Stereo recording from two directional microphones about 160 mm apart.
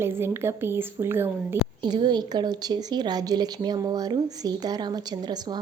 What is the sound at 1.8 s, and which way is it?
A woman's voice, 25° right (ahead or behind).